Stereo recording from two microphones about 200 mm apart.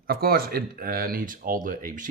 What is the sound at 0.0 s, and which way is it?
Speech, 50° right (ahead or behind).